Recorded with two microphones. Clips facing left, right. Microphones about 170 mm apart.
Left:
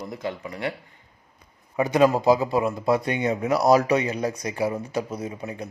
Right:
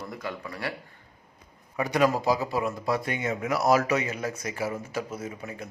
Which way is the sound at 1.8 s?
25° left (ahead or behind).